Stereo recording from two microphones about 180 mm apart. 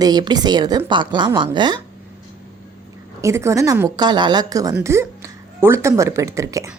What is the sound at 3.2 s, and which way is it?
A woman's voice, 15° right (ahead or behind).